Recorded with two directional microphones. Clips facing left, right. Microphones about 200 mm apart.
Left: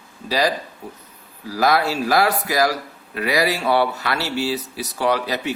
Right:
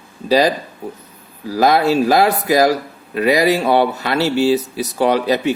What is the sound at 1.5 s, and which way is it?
Speech, 20° right (ahead or behind).